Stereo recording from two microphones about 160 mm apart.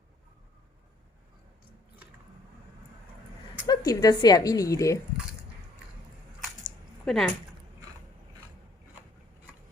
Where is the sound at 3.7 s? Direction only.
25° left (ahead or behind).